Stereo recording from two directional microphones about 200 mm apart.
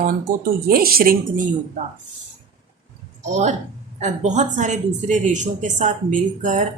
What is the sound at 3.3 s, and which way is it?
A woman's voice, 35° right (ahead or behind).